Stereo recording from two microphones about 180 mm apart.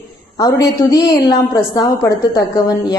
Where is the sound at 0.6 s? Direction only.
20° left (ahead or behind).